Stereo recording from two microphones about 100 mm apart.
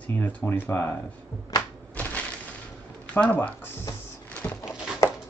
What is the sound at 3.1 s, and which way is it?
Speech, 15° left (ahead or behind).